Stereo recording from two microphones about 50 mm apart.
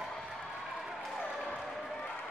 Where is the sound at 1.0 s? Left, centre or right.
Centre.